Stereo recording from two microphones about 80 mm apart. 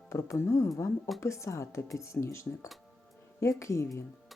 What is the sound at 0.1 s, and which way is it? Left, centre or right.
Speech, left.